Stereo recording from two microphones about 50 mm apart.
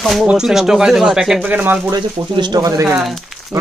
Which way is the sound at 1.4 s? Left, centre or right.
Right.